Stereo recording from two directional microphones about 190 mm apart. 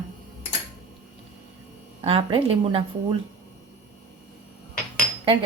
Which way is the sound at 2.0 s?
30° right (ahead or behind).